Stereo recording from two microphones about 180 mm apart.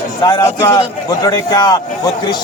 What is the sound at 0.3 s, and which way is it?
A man's voice, 20° left (ahead or behind).